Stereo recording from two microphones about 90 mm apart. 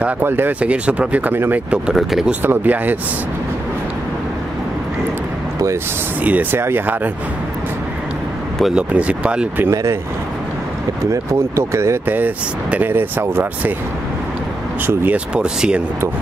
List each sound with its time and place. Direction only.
0.0 s speech: 25° right (ahead or behind)
1.7 s speech: 5° right (ahead or behind)
2.4 s speech: 20° right (ahead or behind)
6.2 s speech: 15° right (ahead or behind)
8.7 s speech: 10° right (ahead or behind)
9.6 s speech: 30° right (ahead or behind)
11.1 s speech: 30° right (ahead or behind)
14.9 s speech: 15° right (ahead or behind)